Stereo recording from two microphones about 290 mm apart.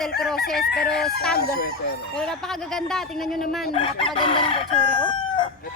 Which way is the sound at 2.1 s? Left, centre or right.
Centre.